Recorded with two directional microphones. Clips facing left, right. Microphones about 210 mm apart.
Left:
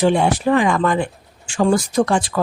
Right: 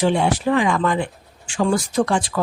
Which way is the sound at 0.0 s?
50° left (ahead or behind).